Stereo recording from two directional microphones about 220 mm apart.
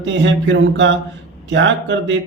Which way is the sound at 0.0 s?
55° right (ahead or behind).